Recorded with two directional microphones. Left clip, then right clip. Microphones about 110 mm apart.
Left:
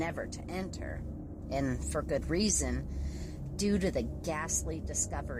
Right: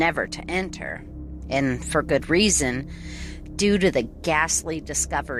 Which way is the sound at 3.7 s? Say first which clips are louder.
Right 12 dB; 35° right (ahead or behind).